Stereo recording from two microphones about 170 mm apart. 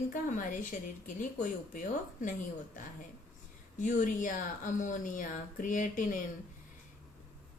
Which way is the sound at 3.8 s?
50° left (ahead or behind).